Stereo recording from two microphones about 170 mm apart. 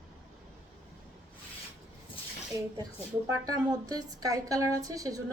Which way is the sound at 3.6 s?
20° right (ahead or behind).